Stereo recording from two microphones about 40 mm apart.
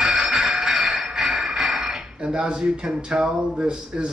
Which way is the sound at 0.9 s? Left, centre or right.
Centre.